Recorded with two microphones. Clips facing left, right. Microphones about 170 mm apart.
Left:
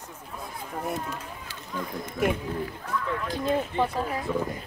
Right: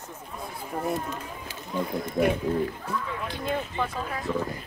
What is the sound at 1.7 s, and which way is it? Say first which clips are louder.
Speech: right 6 dB; 30° right (ahead or behind).